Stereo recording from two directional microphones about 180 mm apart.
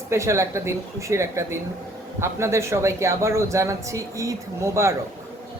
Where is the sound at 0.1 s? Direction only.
15° right (ahead or behind).